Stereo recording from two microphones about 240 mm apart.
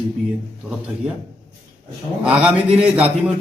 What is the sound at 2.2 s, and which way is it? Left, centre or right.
Speech, centre.